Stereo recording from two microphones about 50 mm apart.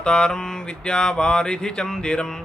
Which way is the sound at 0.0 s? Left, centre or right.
Centre.